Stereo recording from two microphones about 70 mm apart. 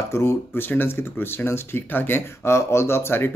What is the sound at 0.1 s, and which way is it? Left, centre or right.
Speech, left.